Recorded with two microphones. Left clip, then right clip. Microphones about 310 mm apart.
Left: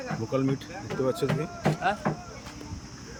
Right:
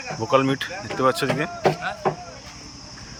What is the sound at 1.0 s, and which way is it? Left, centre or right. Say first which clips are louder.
Speech: right 8 dB; centre.